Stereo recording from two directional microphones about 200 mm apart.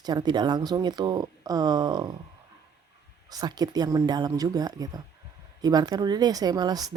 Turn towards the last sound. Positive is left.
turn(degrees=-20)  # may be behind; listen again after turning